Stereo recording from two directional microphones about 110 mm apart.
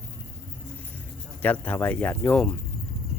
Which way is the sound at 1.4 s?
15° left (ahead or behind).